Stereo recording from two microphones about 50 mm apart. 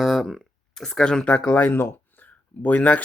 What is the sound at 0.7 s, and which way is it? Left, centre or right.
Speech, centre.